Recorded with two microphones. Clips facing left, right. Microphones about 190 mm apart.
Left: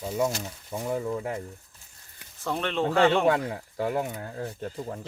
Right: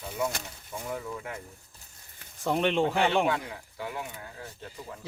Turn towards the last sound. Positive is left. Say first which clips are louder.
# left 8 dB
turn(degrees=40)  # may be behind; listen again after turning